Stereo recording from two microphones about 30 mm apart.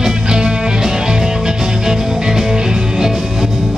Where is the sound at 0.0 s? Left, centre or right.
Right.